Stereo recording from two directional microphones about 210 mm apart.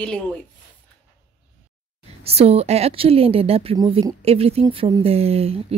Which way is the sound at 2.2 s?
30° right (ahead or behind).